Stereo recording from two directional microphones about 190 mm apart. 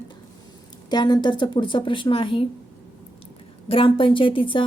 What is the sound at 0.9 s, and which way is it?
Speech, 20° left (ahead or behind).